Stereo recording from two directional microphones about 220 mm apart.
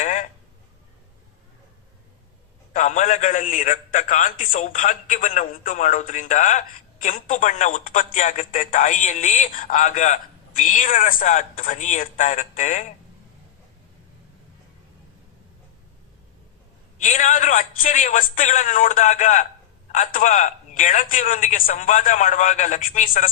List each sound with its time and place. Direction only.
0.0 s a sound: 35° left (ahead or behind)
2.7 s a man's voice: 35° left (ahead or behind)
17.0 s a man's voice: 35° left (ahead or behind)